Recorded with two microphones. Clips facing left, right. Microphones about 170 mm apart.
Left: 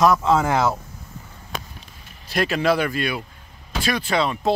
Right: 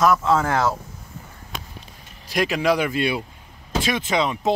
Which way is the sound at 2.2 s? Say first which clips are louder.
Even; 15° right (ahead or behind).